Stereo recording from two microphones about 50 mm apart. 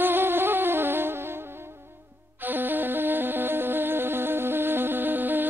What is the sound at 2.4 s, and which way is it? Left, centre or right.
Music, right.